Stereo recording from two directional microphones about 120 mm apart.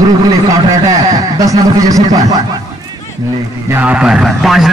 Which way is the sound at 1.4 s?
30° right (ahead or behind).